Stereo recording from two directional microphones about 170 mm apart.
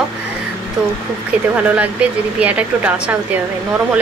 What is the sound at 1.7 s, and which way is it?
Speech, 5° right (ahead or behind).